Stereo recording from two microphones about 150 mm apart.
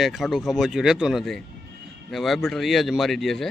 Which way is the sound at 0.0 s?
Centre (ahead or behind).